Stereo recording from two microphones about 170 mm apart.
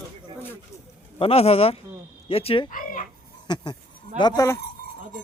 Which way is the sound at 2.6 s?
50° left (ahead or behind).